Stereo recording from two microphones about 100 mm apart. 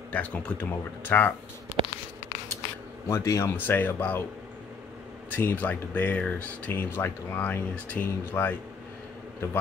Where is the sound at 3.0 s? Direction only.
30° left (ahead or behind).